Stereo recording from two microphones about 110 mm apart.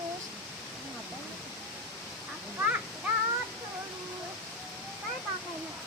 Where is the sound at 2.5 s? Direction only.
15° right (ahead or behind).